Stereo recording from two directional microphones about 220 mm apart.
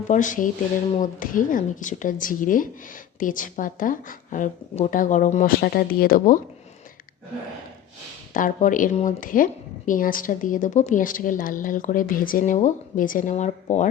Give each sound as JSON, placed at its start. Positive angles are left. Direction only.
{"t": 0.1, "sound": "a woman's voice", "side_deg": 35}
{"t": 8.3, "sound": "a woman's voice", "side_deg": 40}